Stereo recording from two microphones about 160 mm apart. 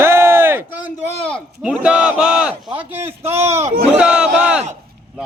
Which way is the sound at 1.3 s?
5° right (ahead or behind).